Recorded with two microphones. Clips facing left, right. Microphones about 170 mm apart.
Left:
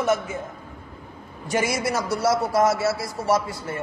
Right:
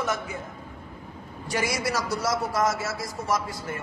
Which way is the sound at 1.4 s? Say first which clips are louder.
Left 4 dB; 25° left (ahead or behind).